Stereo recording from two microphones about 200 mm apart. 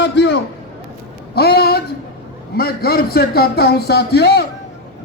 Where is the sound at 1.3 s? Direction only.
55° left (ahead or behind).